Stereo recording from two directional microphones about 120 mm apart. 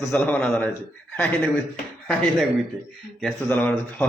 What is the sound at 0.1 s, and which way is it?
A man's voice, 10° left (ahead or behind).